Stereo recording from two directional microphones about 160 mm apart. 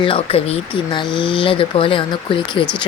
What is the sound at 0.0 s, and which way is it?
Speech, 35° left (ahead or behind).